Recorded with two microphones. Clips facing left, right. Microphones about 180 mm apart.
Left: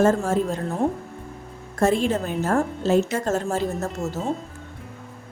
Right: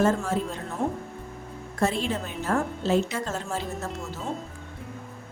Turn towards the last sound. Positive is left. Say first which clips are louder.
# left 6 dB
turn(degrees=45)  # may be behind; listen again after turning